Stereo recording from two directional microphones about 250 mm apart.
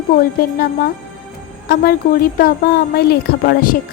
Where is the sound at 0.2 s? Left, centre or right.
Left.